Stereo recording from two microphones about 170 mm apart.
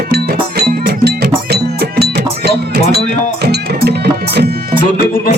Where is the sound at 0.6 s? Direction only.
70° right (ahead or behind).